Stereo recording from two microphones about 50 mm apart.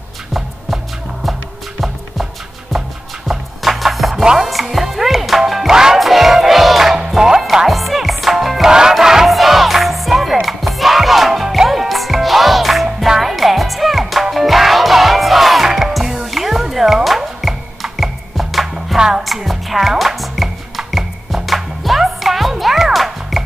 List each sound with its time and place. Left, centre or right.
2.7 s music: centre
4.2 s music: centre
4.5 s music: centre
18.9 s music: centre
19.2 s music: centre